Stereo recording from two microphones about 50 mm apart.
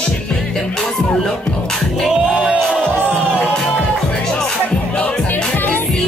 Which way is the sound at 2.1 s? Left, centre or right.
Centre.